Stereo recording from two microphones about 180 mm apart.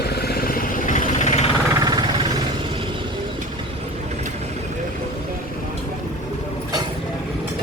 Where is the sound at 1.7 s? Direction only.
20° right (ahead or behind).